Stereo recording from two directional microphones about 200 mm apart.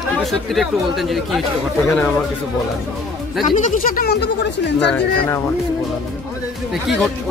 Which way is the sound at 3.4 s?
40° left (ahead or behind).